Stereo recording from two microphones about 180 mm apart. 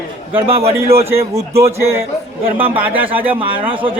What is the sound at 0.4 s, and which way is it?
Speech, 35° right (ahead or behind).